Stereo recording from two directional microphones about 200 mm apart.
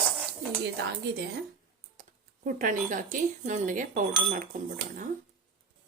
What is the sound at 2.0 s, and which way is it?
Speech, 40° right (ahead or behind).